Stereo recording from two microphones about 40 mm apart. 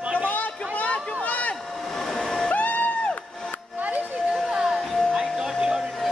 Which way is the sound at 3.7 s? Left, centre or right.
Right.